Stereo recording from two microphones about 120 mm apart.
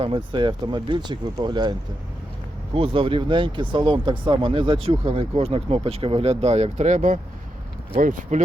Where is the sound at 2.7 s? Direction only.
50° right (ahead or behind).